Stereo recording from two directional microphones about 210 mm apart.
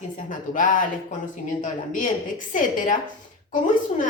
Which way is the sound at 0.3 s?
40° left (ahead or behind).